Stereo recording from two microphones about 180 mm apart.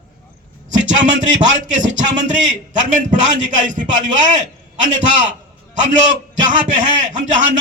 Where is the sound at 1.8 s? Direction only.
90° right.